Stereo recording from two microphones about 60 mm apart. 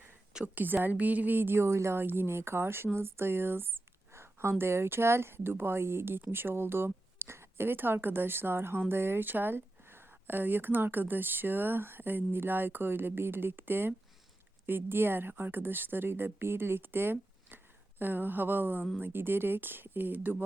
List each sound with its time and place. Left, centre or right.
0.4 s speech: right